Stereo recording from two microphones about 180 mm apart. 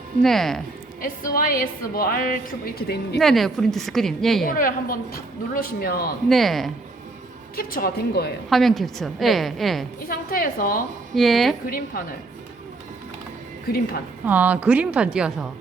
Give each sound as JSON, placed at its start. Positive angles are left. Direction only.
{"t": 0.2, "sound": "a woman's voice", "side_deg": 0}
{"t": 1.0, "sound": "a woman's voice", "side_deg": 55}
{"t": 3.2, "sound": "a woman's voice", "side_deg": 0}
{"t": 4.4, "sound": "a woman's voice", "side_deg": 50}
{"t": 6.2, "sound": "a woman's voice", "side_deg": 0}
{"t": 7.5, "sound": "a woman's voice", "side_deg": 55}
{"t": 8.4, "sound": "a woman's voice", "side_deg": 0}
{"t": 10.1, "sound": "a woman's voice", "side_deg": 55}
{"t": 11.1, "sound": "a woman's voice", "side_deg": 0}
{"t": 11.6, "sound": "a woman's voice", "side_deg": 50}
{"t": 13.7, "sound": "a woman's voice", "side_deg": 55}
{"t": 14.3, "sound": "a woman's voice", "side_deg": -10}